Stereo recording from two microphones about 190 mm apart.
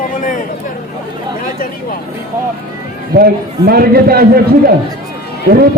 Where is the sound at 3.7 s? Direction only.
55° right (ahead or behind).